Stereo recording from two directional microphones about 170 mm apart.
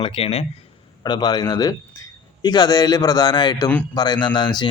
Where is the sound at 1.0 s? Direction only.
25° left (ahead or behind).